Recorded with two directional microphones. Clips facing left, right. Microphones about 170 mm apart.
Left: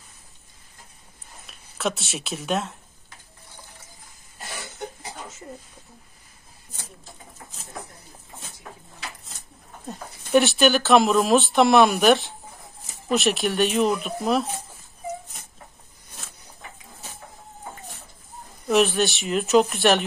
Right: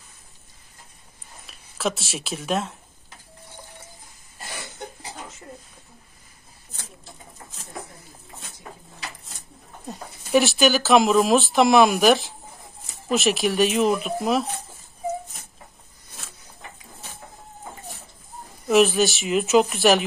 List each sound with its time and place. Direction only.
1.5 s speech: centre (ahead or behind)
9.8 s speech: 5° right (ahead or behind)
18.7 s speech: centre (ahead or behind)